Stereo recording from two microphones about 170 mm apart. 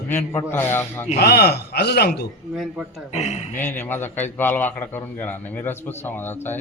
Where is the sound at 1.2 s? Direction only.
70° left (ahead or behind).